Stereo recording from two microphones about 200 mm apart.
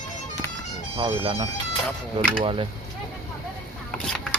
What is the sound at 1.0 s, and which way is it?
Speech, 30° right (ahead or behind).